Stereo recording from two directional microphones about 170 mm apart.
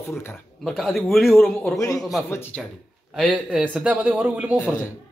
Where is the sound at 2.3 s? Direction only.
15° left (ahead or behind).